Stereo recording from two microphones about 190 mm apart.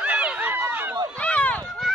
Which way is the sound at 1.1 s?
5° left (ahead or behind).